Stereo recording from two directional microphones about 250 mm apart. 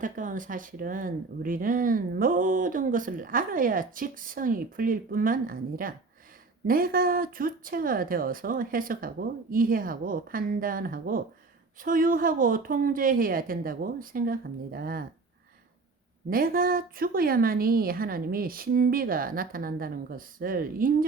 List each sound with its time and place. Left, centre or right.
0.0 s speech: right
16.3 s speech: right